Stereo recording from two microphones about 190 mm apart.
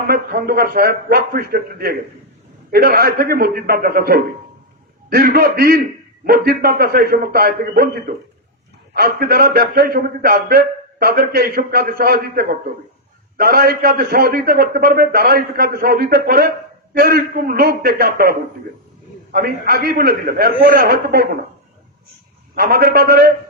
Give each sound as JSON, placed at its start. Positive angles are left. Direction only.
{"t": 0.1, "sound": "a man's voice", "side_deg": -50}
{"t": 22.5, "sound": "a man's voice", "side_deg": -55}